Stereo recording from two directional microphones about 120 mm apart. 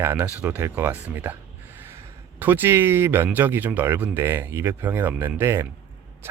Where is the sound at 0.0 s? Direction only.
15° right (ahead or behind).